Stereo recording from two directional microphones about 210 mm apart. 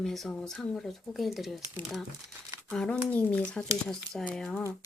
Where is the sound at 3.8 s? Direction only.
5° left (ahead or behind).